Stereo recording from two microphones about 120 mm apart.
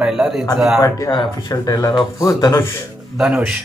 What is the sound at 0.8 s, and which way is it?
Mantra, 35° left (ahead or behind).